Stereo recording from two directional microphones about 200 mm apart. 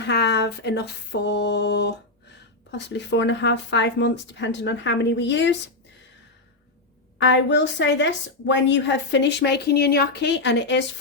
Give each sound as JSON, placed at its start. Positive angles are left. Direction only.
{"t": 0.0, "sound": "speech", "side_deg": 55}
{"t": 7.2, "sound": "speech", "side_deg": 65}